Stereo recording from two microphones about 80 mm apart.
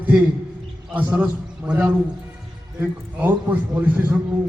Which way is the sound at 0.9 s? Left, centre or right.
Centre.